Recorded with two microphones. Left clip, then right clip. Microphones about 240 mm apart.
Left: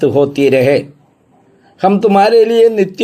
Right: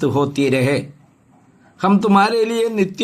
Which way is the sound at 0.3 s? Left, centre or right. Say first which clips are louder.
Left 8 dB; centre.